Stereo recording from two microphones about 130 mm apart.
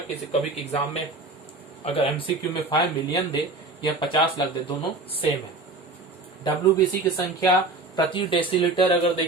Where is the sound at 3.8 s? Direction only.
40° left (ahead or behind).